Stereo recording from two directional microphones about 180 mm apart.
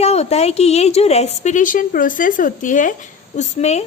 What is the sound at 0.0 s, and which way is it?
A woman's voice, 35° left (ahead or behind).